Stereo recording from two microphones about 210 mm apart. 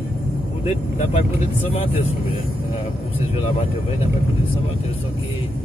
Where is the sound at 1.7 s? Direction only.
25° left (ahead or behind).